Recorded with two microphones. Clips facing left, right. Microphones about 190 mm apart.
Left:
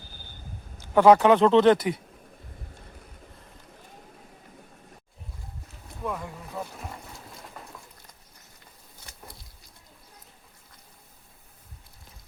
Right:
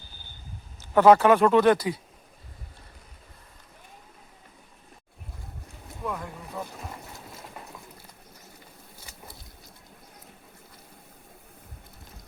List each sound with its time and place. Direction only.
0.8 s speech: 15° left (ahead or behind)
6.1 s boat: 5° left (ahead or behind)
9.0 s a sound: centre (ahead or behind)